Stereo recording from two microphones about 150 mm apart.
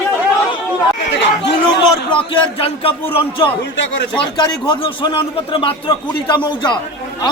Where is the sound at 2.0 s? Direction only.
35° left (ahead or behind).